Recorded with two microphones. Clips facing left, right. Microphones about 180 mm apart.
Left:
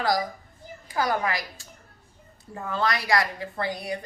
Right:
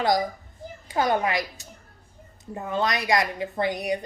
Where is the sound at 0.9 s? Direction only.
25° right (ahead or behind).